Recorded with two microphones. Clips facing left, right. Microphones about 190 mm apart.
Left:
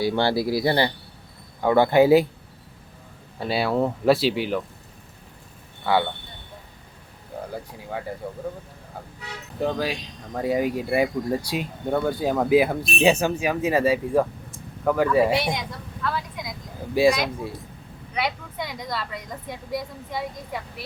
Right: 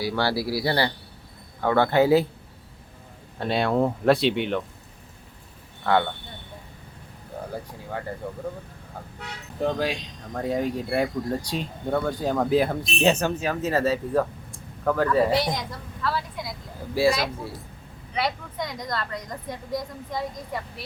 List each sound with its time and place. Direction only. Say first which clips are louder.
0.0 s speech: left 3 dB; 25° left (ahead or behind)
3.3 s a woman's voice: even; 5° left (ahead or behind)
5.8 s speech: even; 5° left (ahead or behind)
9.6 s speech: even; centre (ahead or behind)
16.9 s speech: left 3 dB; 15° left (ahead or behind)
18.1 s a woman's voice: even; 5° left (ahead or behind)